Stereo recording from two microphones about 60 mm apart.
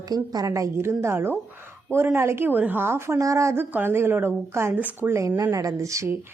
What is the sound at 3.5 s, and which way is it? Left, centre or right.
A woman's voice, right.